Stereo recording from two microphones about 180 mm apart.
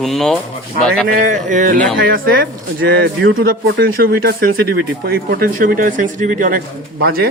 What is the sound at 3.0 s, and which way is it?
Speech, 70° right (ahead or behind).